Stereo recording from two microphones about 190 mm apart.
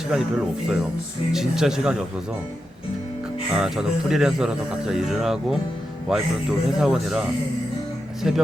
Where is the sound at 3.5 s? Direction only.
5° right (ahead or behind).